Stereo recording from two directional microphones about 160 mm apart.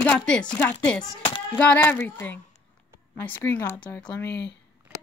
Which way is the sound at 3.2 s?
10° left (ahead or behind).